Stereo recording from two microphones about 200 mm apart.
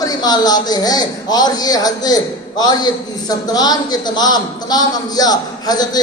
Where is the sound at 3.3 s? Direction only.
20° left (ahead or behind).